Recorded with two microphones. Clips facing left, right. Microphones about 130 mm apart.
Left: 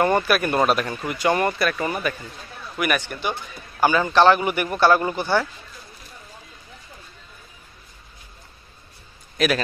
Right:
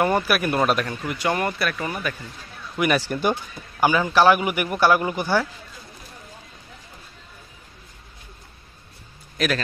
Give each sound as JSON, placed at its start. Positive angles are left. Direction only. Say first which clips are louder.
{"t": 0.0, "sound": "a man's voice", "louder": "left 1 dB", "side_deg": -5}
{"t": 0.6, "sound": "speech", "louder": "left 1 dB", "side_deg": 5}
{"t": 3.0, "sound": "a man's voice", "louder": "right 5 dB", "side_deg": -40}
{"t": 3.8, "sound": "a man's voice", "louder": "left 1 dB", "side_deg": -10}
{"t": 9.4, "sound": "speech", "louder": "left 3 dB", "side_deg": 0}